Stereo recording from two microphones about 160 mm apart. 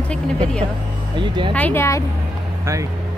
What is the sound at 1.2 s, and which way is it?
Speech, 30° right (ahead or behind).